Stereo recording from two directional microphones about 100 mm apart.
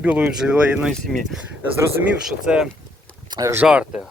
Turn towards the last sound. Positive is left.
turn(degrees=-10)  # may be behind; listen again after turning